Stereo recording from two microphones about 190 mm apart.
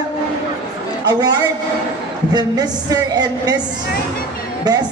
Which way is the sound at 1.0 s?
20° right (ahead or behind).